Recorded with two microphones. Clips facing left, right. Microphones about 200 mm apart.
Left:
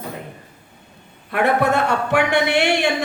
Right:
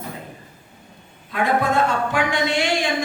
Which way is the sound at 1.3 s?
65° left (ahead or behind).